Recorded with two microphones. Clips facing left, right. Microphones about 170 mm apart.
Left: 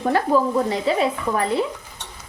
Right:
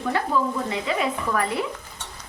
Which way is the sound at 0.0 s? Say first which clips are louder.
Left 5 dB; 40° left (ahead or behind).